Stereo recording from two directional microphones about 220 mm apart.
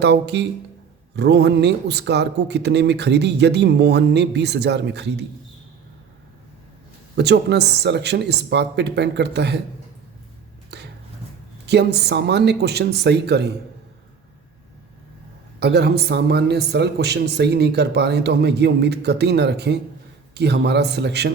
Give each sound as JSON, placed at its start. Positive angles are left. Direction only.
{"t": 0.0, "sound": "speech", "side_deg": -50}
{"t": 7.2, "sound": "speech", "side_deg": -50}
{"t": 10.7, "sound": "a sound", "side_deg": -50}
{"t": 11.6, "sound": "speech", "side_deg": -50}
{"t": 15.6, "sound": "speech", "side_deg": -50}